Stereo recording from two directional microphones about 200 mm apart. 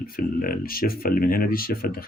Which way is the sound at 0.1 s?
45° left (ahead or behind).